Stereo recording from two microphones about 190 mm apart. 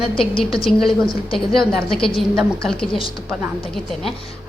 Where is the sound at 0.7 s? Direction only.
Centre (ahead or behind).